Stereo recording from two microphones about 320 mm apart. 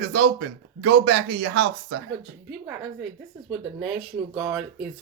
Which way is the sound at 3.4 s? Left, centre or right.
Centre.